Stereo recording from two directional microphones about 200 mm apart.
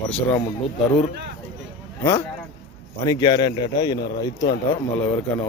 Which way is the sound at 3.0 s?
20° left (ahead or behind).